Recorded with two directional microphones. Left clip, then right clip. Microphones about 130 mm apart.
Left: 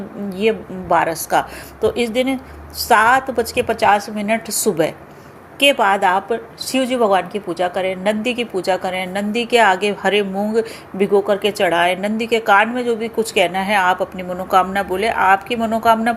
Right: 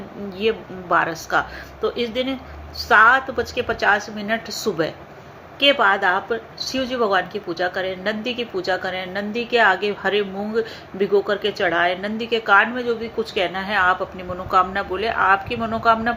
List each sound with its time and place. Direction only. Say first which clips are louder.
0.3 s a woman's voice: left 4 dB; 40° left (ahead or behind)